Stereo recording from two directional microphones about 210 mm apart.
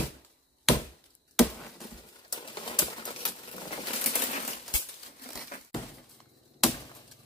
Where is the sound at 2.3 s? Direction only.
20° left (ahead or behind).